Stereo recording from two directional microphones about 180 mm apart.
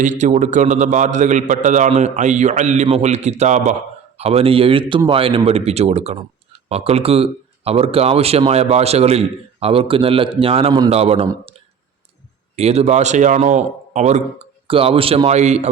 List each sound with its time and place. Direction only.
0.0 s a man's voice: 45° right (ahead or behind)
12.5 s a man's voice: 35° right (ahead or behind)